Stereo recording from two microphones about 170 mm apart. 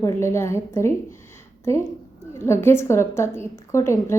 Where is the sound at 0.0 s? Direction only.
15° left (ahead or behind).